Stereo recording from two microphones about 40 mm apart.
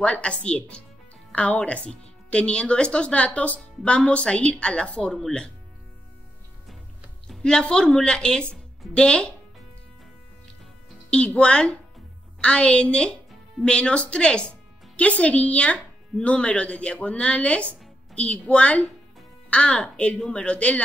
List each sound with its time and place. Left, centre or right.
0.0 s speech: left
7.7 s speech: centre
11.1 s speech: left